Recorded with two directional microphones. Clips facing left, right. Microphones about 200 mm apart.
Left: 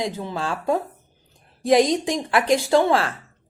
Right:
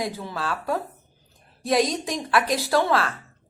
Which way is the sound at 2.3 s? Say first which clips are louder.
Left 4 dB; 25° left (ahead or behind).